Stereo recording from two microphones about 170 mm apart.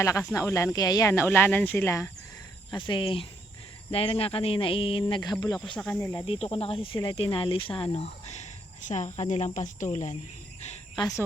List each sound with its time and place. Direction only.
0.0 s speech: 20° left (ahead or behind)
2.6 s speech: 30° left (ahead or behind)
5.7 s speech: 5° left (ahead or behind)
6.2 s speech: 35° left (ahead or behind)
8.3 s a sound: 45° left (ahead or behind)
9.3 s speech: 45° left (ahead or behind)
10.9 s speech: 25° left (ahead or behind)